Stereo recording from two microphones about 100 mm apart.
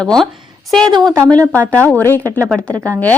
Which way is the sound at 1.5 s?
15° left (ahead or behind).